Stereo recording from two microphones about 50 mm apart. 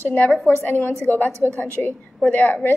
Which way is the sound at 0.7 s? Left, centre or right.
Left.